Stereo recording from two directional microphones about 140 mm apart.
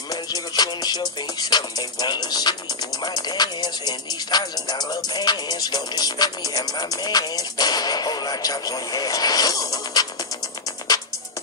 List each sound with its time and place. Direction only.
0.1 s music: 30° left (ahead or behind)